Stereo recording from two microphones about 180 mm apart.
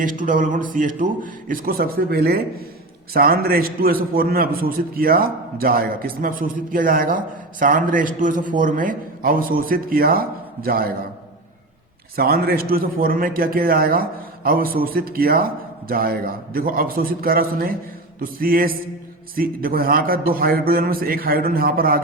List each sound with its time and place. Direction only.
0.0 s a man's voice: 50° right (ahead or behind)
12.1 s a man's voice: 55° right (ahead or behind)